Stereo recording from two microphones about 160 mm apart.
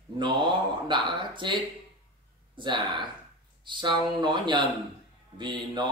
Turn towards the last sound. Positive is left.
turn(degrees=-30)  # may be behind; listen again after turning